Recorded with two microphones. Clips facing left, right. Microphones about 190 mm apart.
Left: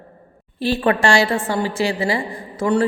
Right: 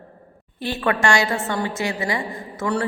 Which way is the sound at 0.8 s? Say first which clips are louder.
Left 2 dB; 30° left (ahead or behind).